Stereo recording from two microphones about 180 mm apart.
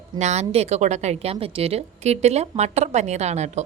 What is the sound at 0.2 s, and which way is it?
A woman's voice, 40° right (ahead or behind).